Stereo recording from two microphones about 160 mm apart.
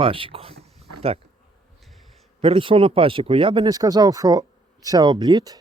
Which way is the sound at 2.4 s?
35° right (ahead or behind).